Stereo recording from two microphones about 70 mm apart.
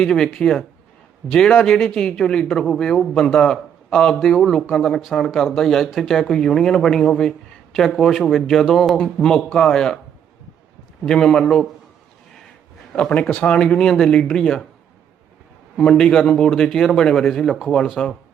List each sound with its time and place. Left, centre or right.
0.0 s a man's voice: centre
11.0 s a man's voice: centre
11.4 s speech: centre
13.0 s a man's voice: centre
15.8 s a man's voice: centre